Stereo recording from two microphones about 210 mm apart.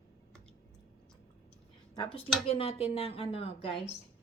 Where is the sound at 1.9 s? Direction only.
20° left (ahead or behind).